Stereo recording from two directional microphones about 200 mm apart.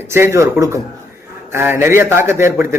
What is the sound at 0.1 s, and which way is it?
Speech, 15° right (ahead or behind).